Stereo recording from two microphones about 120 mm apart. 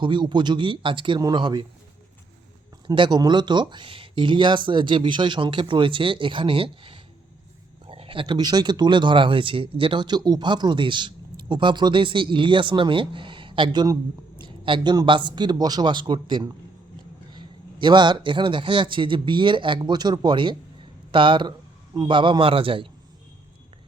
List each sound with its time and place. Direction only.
0.0 s speech: 40° right (ahead or behind)
2.8 s speech: 40° right (ahead or behind)
14.4 s a sound: 40° right (ahead or behind)
14.9 s a man's voice: 40° right (ahead or behind)